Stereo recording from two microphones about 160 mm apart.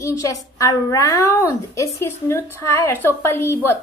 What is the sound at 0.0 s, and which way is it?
A woman's voice, 20° left (ahead or behind).